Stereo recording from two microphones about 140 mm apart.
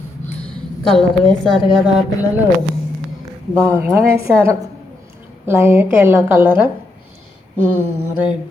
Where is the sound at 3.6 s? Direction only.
15° right (ahead or behind).